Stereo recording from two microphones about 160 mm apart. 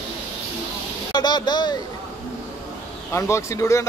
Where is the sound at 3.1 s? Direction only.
20° left (ahead or behind).